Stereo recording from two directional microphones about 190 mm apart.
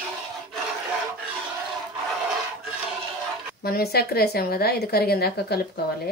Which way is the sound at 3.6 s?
55° left (ahead or behind).